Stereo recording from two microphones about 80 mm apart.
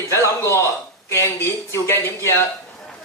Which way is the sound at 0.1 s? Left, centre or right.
Left.